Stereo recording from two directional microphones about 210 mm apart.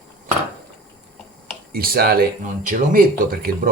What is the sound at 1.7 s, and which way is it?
Speech, 45° right (ahead or behind).